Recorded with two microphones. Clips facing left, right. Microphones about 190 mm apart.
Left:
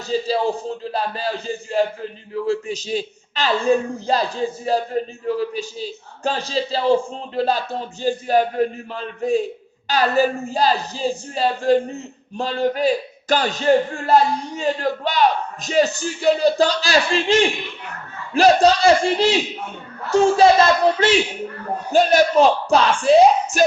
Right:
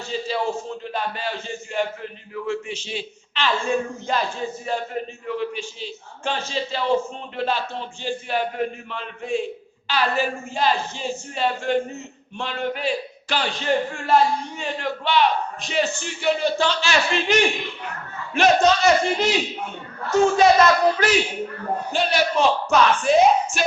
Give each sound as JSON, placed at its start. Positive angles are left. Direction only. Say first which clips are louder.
{"t": 0.1, "sound": "speech", "louder": "left 5 dB", "side_deg": 35}
{"t": 18.3, "sound": "speech", "louder": "left 3 dB", "side_deg": 35}
{"t": 21.9, "sound": "speech", "louder": "left 8 dB", "side_deg": 40}